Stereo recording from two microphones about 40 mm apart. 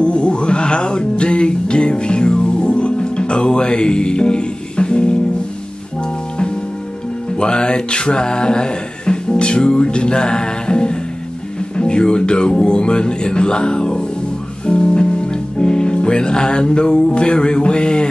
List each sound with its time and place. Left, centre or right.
0.0 s music: left
7.3 s music: left